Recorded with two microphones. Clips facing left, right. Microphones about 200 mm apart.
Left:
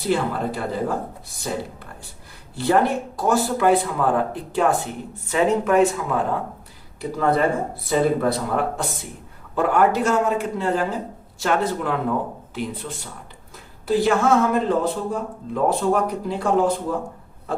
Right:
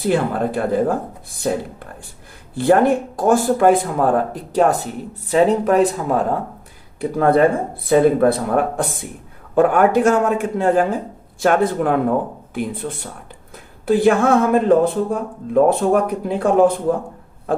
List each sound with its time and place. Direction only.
0.0 s a man's voice: 55° right (ahead or behind)
2.6 s speech: 55° right (ahead or behind)
7.0 s a man's voice: 55° right (ahead or behind)